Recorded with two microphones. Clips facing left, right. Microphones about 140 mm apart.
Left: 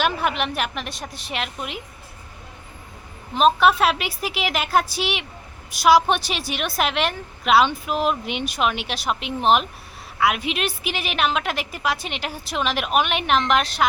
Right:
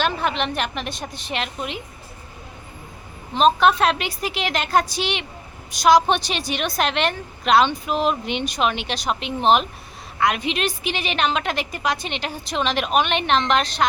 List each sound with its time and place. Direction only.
0.0 s a woman's voice: 10° left (ahead or behind)
3.3 s a woman's voice: 5° left (ahead or behind)